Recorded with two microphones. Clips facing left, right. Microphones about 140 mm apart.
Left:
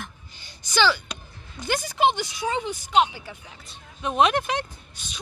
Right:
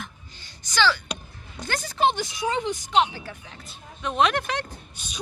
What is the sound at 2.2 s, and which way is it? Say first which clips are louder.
Speech: right 1 dB; 15° right (ahead or behind).